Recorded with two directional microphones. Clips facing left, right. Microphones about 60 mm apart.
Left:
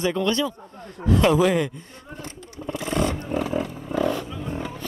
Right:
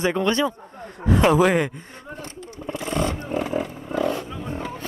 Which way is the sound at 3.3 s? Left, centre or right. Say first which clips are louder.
Even; centre.